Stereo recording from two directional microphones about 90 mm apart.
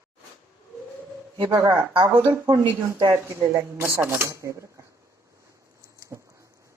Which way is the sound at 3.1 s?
30° right (ahead or behind).